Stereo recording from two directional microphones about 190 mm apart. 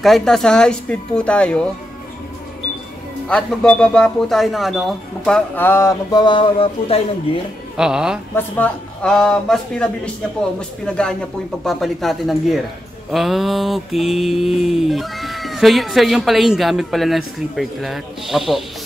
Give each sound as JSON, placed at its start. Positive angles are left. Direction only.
{"t": 0.0, "sound": "mantra", "side_deg": 0}
{"t": 3.3, "sound": "mantra", "side_deg": 5}
{"t": 7.7, "sound": "mantra", "side_deg": -5}
{"t": 8.4, "sound": "mantra", "side_deg": 10}